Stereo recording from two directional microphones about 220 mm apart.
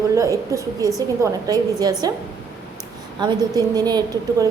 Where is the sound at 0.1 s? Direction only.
15° right (ahead or behind).